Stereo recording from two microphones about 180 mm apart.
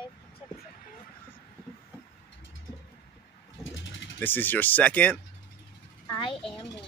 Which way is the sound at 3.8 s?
90° left.